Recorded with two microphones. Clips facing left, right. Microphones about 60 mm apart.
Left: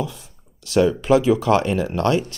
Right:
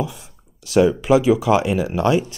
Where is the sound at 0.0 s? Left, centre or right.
Centre.